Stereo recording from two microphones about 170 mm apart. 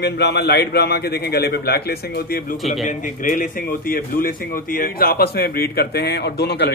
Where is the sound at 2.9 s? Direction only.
50° left (ahead or behind).